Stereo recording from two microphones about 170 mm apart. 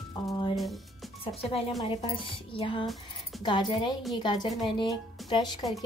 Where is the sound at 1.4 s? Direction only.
35° left (ahead or behind).